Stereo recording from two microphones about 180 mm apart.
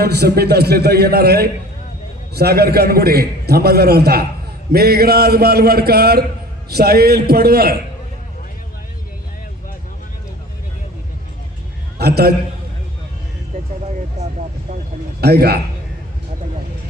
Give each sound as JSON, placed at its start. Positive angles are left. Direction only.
{"t": 0.0, "sound": "a man's voice", "side_deg": -60}
{"t": 11.9, "sound": "a man's voice", "side_deg": -60}
{"t": 15.2, "sound": "a man's voice", "side_deg": -60}